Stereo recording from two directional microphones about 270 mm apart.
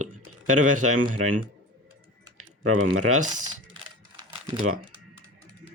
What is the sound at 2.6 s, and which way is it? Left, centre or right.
Speech, right.